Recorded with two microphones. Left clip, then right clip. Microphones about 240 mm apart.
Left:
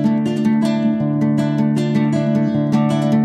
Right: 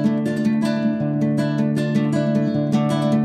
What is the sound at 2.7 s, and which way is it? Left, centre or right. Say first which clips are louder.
Music: left 3 dB; left.